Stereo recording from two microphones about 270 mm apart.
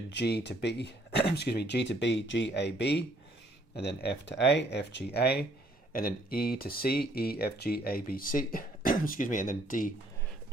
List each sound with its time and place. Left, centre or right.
0.1 s speech: left